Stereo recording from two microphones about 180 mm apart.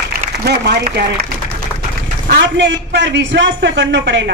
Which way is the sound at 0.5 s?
65° right (ahead or behind).